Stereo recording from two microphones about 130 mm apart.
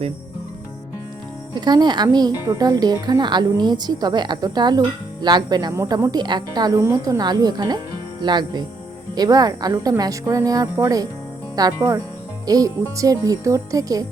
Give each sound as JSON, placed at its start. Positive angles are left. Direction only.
{"t": 1.5, "sound": "a woman's voice", "side_deg": -35}
{"t": 5.7, "sound": "a woman's voice", "side_deg": -20}